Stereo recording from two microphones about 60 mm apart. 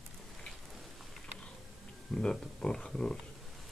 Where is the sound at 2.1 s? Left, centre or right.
Centre.